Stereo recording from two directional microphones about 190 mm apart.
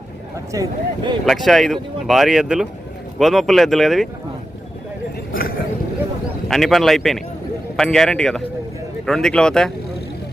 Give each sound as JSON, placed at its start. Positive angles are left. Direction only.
{"t": 0.5, "sound": "speech", "side_deg": -20}
{"t": 1.2, "sound": "speech", "side_deg": 0}
{"t": 5.3, "sound": "a sound", "side_deg": 50}
{"t": 6.5, "sound": "speech", "side_deg": 0}